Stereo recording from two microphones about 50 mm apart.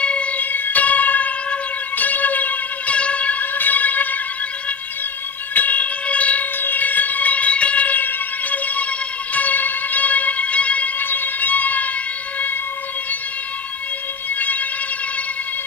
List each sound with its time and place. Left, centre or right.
0.0 s music: left
0.4 s music: left
5.5 s siren: left
9.3 s music: left